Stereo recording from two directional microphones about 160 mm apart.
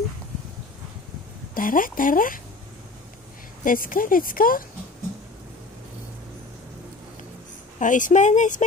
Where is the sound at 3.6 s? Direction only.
60° left (ahead or behind).